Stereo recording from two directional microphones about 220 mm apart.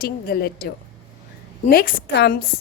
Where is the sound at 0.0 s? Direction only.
45° left (ahead or behind).